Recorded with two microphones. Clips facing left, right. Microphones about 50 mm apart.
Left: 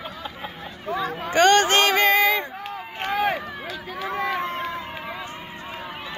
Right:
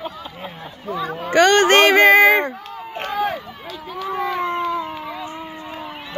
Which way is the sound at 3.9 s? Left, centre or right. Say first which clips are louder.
Right 3 dB; centre.